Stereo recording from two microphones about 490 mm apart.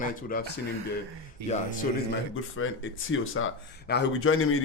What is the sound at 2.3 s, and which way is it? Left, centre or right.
Speech, left.